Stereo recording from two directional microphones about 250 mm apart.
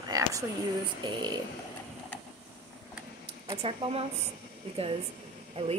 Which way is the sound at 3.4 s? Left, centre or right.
Centre.